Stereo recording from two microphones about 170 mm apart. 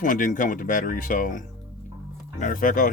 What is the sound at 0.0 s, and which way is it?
Speech, 50° left (ahead or behind).